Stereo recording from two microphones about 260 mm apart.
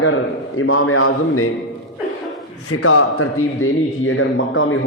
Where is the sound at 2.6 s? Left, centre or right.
Left.